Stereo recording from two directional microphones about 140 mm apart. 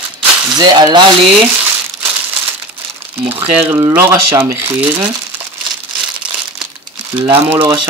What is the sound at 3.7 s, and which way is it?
Speech, 20° right (ahead or behind).